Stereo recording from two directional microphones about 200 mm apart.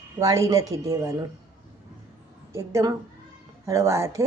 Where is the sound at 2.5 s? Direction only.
15° right (ahead or behind).